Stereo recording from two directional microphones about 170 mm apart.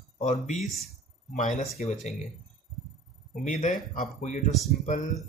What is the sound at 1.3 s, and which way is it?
Speech, 40° left (ahead or behind).